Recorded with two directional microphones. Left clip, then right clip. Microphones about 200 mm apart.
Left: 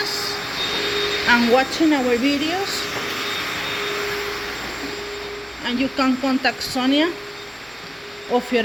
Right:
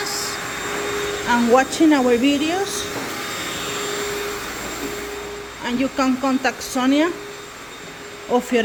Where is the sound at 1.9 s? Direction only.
10° right (ahead or behind).